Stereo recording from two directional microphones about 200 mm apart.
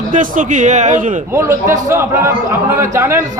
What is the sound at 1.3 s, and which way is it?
A man's voice, 15° right (ahead or behind).